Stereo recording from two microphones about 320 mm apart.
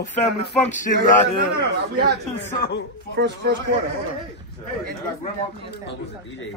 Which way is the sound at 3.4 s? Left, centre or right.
Right.